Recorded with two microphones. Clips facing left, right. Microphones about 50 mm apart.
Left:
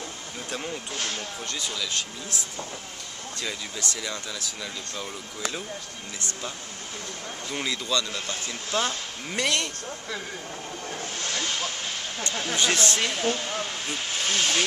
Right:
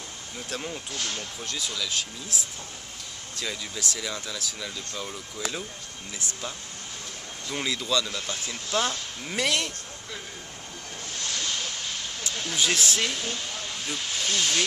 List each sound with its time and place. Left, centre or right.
0.5 s speech: centre
0.9 s speech: left
1.5 s speech: centre
7.5 s speech: centre
11.2 s hiss: left
12.3 s speech: left
12.5 s speech: centre
13.1 s speech: left